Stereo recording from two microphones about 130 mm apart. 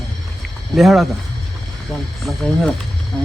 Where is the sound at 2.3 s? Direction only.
5° left (ahead or behind).